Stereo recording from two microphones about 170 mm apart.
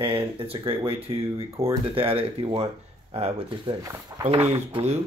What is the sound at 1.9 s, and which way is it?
Speech, 35° right (ahead or behind).